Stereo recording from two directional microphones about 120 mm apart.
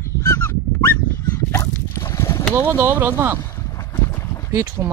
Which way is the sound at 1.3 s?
25° left (ahead or behind).